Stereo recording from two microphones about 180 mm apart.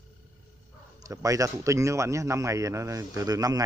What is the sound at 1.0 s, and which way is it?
A man's voice, 20° right (ahead or behind).